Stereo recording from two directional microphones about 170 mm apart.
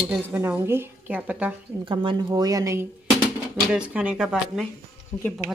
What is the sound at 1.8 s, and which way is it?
Speech, 30° right (ahead or behind).